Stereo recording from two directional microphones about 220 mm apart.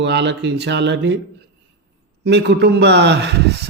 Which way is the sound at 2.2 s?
50° right (ahead or behind).